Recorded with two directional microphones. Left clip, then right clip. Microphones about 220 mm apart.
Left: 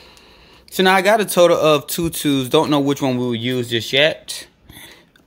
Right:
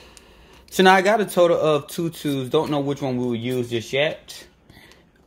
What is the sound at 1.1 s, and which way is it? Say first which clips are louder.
Speech: left 4 dB; 20° left (ahead or behind).